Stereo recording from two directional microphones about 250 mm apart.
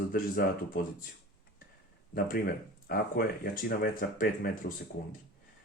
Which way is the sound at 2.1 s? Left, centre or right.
Left.